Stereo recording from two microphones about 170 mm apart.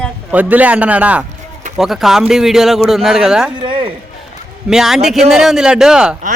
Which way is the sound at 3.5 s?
30° right (ahead or behind).